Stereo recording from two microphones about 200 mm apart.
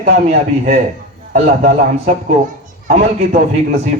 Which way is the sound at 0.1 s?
40° right (ahead or behind).